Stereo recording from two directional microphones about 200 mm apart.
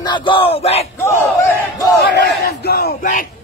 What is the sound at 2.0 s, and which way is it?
Battle cry, 55° left (ahead or behind).